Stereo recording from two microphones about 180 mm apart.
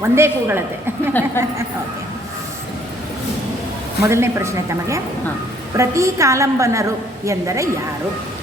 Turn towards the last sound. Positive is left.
turn(degrees=-15)  # may be behind; listen again after turning